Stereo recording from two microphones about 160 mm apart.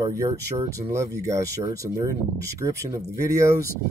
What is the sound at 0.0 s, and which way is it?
Speech, 20° right (ahead or behind).